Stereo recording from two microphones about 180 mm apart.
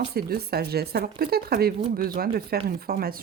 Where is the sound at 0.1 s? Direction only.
60° right (ahead or behind).